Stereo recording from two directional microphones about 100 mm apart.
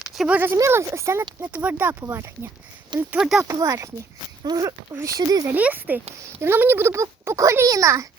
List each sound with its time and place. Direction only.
0.0 s a sound: 5° right (ahead or behind)
0.3 s speech: 25° right (ahead or behind)
1.4 s speech: 15° right (ahead or behind)
3.2 s speech: 5° right (ahead or behind)
3.4 s speech: 35° right (ahead or behind)
5.5 s speech: 15° right (ahead or behind); by 8.0 s 35° right (ahead or behind)